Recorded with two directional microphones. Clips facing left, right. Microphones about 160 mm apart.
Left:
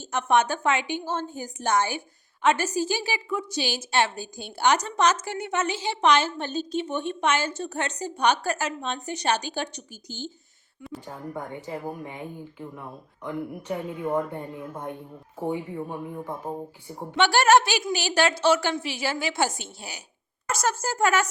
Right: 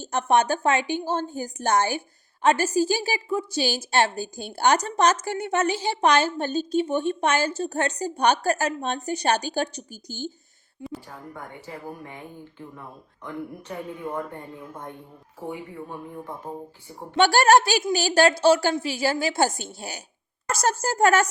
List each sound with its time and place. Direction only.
0.0 s a woman's voice: 35° right (ahead or behind)
11.0 s a woman's voice: 20° left (ahead or behind)
17.2 s a woman's voice: 40° right (ahead or behind)